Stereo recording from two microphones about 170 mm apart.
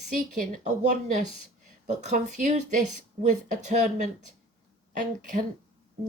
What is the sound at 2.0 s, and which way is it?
Speech, 45° right (ahead or behind).